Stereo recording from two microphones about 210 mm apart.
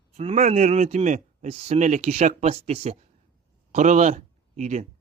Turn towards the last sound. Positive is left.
turn(degrees=-35)  # may be behind; listen again after turning